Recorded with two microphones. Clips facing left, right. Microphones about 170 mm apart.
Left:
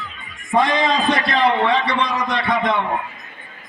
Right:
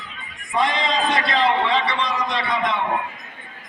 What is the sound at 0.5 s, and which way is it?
A man's voice, 50° left (ahead or behind).